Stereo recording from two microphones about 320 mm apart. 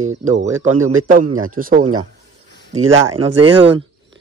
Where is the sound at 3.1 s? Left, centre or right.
Centre.